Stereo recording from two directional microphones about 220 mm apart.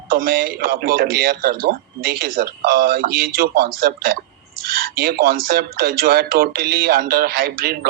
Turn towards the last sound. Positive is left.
turn(degrees=-45)  # may be behind; listen again after turning